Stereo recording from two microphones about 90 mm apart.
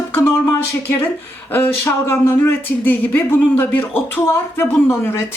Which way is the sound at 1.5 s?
25° left (ahead or behind).